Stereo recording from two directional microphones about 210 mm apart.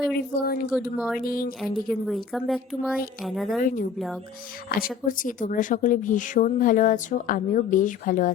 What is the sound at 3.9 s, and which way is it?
Speech, centre (ahead or behind).